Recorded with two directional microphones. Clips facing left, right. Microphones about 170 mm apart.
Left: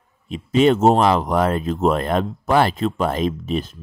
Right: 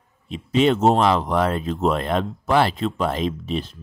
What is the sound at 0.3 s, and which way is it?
Speech, 45° left (ahead or behind).